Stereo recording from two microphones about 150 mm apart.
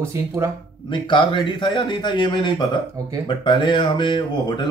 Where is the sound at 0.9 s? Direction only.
35° left (ahead or behind).